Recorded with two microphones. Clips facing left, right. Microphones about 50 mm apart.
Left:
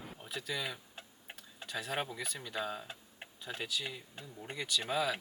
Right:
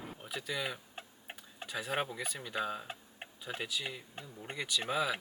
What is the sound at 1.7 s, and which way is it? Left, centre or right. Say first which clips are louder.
Speech: right 2 dB; centre.